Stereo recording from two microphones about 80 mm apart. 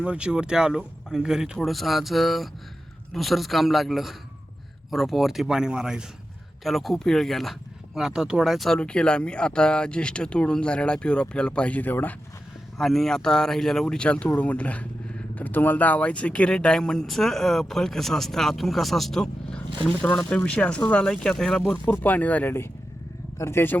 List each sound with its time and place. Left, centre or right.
0.0 s speech: centre
8.8 s speech: centre
12.8 s speech: centre
21.8 s speech: left